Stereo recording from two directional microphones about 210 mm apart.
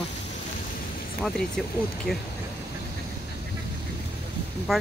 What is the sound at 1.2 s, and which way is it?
Speech, 5° left (ahead or behind).